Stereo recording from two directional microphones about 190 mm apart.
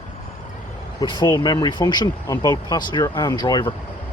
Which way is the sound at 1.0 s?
25° left (ahead or behind).